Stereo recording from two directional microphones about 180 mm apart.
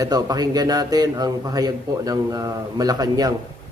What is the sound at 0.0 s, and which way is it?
A man's voice, 20° right (ahead or behind).